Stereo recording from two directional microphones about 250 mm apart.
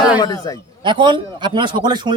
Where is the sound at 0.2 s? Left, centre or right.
Centre.